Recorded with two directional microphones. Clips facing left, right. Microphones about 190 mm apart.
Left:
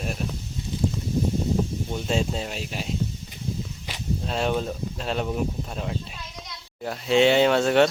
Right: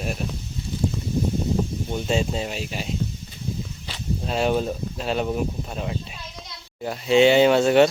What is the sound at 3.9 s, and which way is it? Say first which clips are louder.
Walk: even; 15° left (ahead or behind).